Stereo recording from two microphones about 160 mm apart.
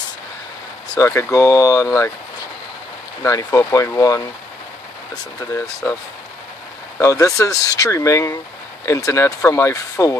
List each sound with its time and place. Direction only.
0.9 s speech: 20° left (ahead or behind)
3.3 s speech: 20° left (ahead or behind)
7.0 s speech: 20° left (ahead or behind)